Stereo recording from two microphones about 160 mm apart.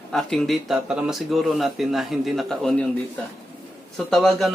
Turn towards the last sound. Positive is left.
turn(degrees=0)  # may be behind; listen again after turning